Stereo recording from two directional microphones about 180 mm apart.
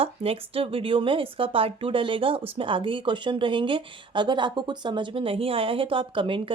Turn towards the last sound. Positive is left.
turn(degrees=-30)  # may be behind; listen again after turning